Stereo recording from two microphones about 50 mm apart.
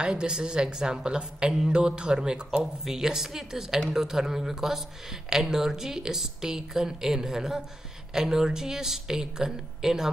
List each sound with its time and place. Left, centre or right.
0.0 s speech: centre